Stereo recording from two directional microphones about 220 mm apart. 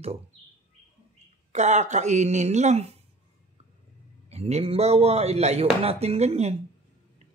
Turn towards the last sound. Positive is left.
turn(degrees=-30)  # may be behind; listen again after turning